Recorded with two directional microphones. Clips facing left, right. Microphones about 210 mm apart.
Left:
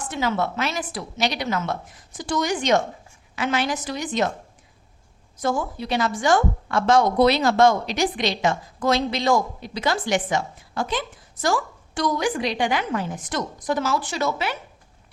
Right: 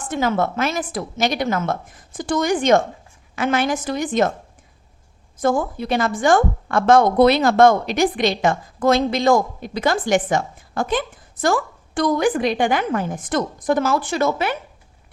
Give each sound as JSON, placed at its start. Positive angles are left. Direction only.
{"t": 0.1, "sound": "a woman's voice", "side_deg": -50}
{"t": 5.4, "sound": "a woman's voice", "side_deg": -50}